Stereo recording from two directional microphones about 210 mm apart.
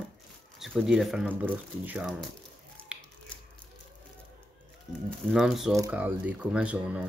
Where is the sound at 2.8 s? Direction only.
5° left (ahead or behind).